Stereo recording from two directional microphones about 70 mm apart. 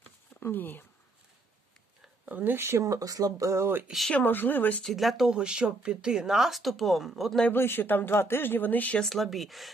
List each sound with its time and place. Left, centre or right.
0.3 s speech: left
2.2 s speech: right
4.1 s speech: left
4.8 s speech: centre
7.5 s speech: left
9.0 s speech: centre